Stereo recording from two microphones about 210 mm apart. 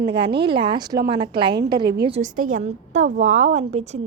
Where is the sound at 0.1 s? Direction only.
25° right (ahead or behind).